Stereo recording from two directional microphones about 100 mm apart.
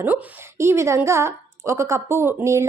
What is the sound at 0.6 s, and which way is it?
A woman's voice, 25° right (ahead or behind).